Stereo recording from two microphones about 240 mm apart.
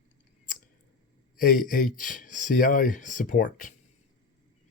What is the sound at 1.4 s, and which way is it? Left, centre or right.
Speech, left.